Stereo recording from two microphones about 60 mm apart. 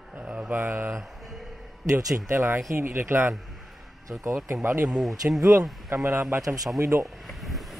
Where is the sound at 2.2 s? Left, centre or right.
Right.